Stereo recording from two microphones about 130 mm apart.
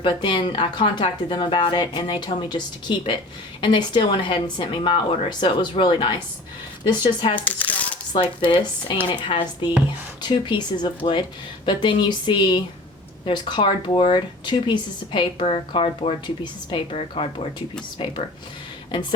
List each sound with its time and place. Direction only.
0.0 s speech: 40° left (ahead or behind)
7.3 s speech: 10° left (ahead or behind)
9.0 s speech: 40° left (ahead or behind)